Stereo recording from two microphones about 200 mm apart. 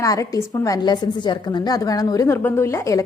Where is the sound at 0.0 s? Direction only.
15° left (ahead or behind).